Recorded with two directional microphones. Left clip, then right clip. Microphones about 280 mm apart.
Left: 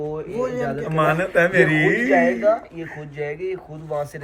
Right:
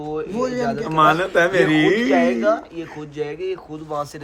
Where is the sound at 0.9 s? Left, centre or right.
Centre.